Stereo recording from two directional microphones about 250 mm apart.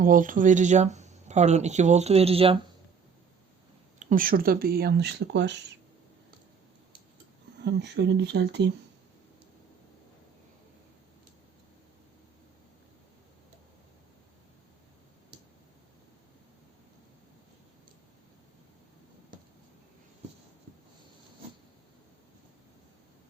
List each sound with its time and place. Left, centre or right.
0.0 s speech: right
4.0 s speech: right
7.6 s speech: right